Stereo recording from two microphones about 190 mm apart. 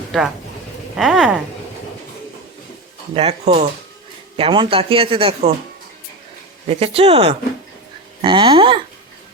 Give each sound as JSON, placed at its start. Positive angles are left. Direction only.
{"t": 0.9, "sound": "speech", "side_deg": -5}
{"t": 3.2, "sound": "speech", "side_deg": -30}
{"t": 6.7, "sound": "speech", "side_deg": -30}